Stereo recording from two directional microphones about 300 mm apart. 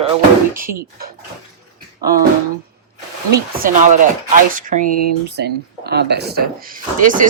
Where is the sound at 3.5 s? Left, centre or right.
Right.